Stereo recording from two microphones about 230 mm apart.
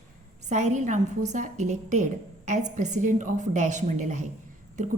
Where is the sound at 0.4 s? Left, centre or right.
Right.